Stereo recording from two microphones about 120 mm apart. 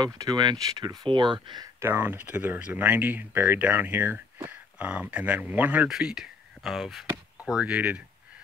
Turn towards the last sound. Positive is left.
turn(degrees=-10)  # may be behind; listen again after turning